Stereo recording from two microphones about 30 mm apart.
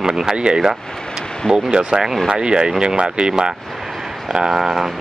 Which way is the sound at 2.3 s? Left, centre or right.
Right.